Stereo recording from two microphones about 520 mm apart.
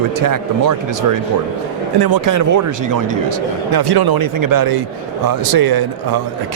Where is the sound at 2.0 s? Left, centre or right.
Right.